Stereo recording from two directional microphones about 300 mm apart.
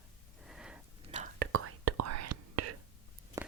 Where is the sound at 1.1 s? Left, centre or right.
Right.